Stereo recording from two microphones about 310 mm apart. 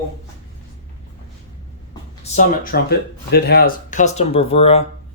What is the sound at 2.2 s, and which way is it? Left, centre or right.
Speech, left.